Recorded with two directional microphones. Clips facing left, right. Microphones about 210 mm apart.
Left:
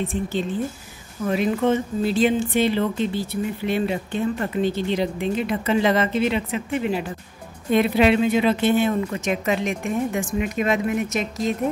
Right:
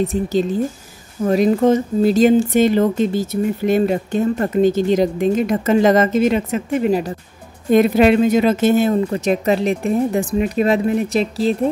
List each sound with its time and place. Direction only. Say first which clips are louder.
0.0 s speech: right 7 dB; 40° right (ahead or behind)